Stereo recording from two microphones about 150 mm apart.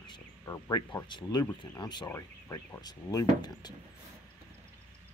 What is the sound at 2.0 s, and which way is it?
Speech, 20° left (ahead or behind).